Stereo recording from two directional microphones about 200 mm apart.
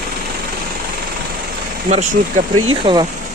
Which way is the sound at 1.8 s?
35° right (ahead or behind).